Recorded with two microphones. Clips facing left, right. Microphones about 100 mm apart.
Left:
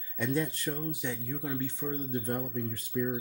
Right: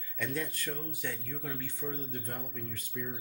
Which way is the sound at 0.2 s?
25° left (ahead or behind).